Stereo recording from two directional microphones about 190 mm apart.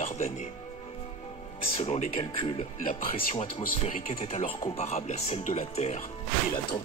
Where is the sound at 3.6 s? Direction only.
45° left (ahead or behind).